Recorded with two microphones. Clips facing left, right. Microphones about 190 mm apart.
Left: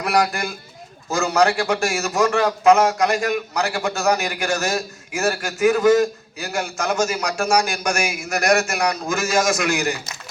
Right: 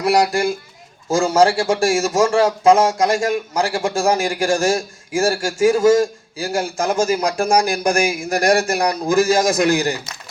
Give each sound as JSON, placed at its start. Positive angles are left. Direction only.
{"t": 0.0, "sound": "a man's voice", "side_deg": -25}